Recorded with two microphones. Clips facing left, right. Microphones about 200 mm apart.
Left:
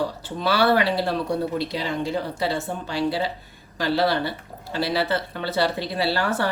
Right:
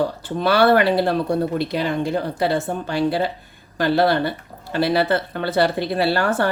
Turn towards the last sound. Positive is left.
turn(degrees=-50)  # may be behind; listen again after turning